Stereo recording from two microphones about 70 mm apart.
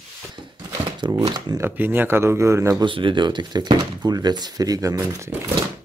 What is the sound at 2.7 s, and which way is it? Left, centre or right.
Speech, right.